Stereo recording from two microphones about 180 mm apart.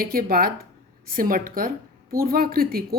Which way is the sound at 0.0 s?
55° right (ahead or behind).